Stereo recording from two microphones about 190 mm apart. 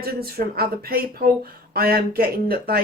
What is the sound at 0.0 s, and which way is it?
A woman's voice, 55° right (ahead or behind).